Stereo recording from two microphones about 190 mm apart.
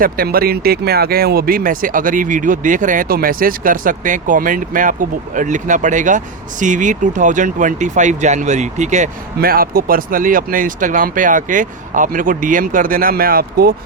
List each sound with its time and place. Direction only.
0.0 s speech: 50° right (ahead or behind)